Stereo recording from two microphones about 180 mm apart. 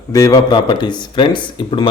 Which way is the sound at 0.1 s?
20° left (ahead or behind).